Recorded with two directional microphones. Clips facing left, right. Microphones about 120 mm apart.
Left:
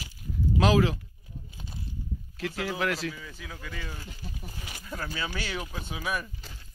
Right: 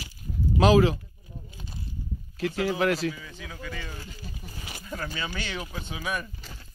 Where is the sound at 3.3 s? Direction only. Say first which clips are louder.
Right 3 dB; centre (ahead or behind).